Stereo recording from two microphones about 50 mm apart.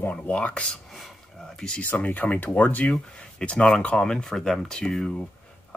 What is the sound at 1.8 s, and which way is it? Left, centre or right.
Speech, left.